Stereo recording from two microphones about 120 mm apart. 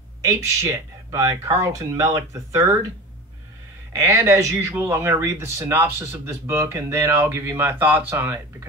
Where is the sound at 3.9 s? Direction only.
25° right (ahead or behind).